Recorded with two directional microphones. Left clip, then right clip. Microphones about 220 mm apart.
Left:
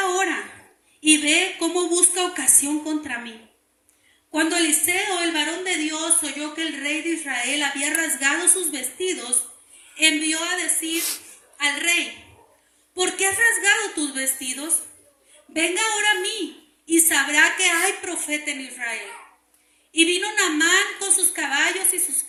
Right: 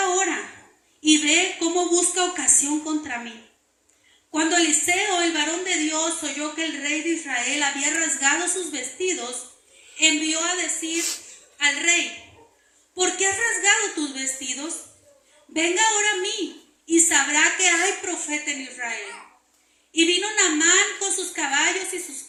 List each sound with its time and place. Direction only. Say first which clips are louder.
0.0 s a sound: even; 55° left (ahead or behind)
1.0 s a woman's voice: even; 55° left (ahead or behind)
4.3 s a woman's voice: even; 55° left (ahead or behind)
15.5 s a woman's voice: right 1 dB; 55° left (ahead or behind)